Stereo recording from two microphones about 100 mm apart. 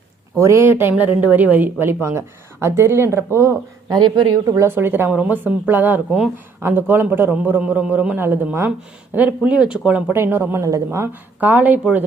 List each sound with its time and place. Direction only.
0.3 s speech: 30° right (ahead or behind)
3.8 s speech: 45° right (ahead or behind)
4.5 s speech: 25° right (ahead or behind); by 10.0 s 10° right (ahead or behind)
10.1 s speech: 25° right (ahead or behind)
11.3 s speech: 15° right (ahead or behind)